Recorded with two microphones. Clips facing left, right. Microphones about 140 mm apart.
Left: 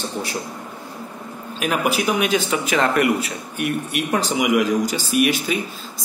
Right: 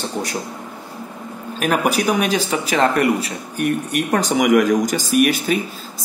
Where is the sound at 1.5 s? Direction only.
45° right (ahead or behind).